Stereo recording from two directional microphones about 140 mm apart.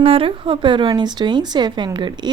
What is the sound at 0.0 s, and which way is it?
A woman's voice, 40° right (ahead or behind).